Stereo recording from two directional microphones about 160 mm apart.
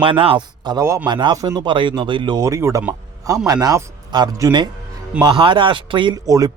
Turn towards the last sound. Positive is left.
turn(degrees=-25)  # may be behind; listen again after turning